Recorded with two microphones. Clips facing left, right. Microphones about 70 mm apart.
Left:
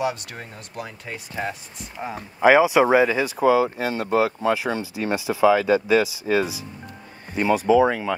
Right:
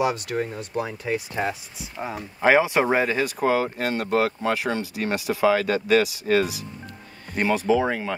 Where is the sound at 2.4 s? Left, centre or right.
Centre.